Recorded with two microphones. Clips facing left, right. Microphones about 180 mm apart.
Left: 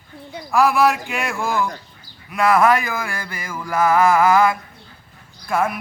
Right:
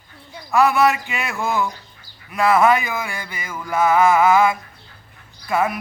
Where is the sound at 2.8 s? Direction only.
20° right (ahead or behind).